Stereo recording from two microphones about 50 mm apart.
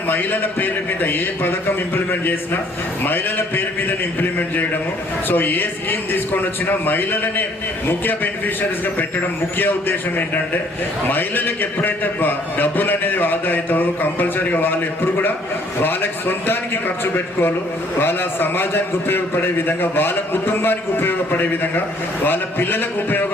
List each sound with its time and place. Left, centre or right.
0.1 s a man's voice: left
9.6 s a man's voice: left
15.8 s a man's voice: left
18.0 s a man's voice: left